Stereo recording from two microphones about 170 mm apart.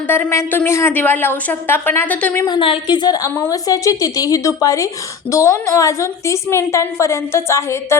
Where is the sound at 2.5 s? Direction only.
30° left (ahead or behind).